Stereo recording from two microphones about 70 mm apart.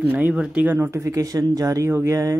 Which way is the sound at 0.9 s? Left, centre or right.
Right.